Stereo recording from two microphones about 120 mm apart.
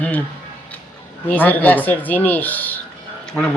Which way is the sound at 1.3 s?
15° left (ahead or behind).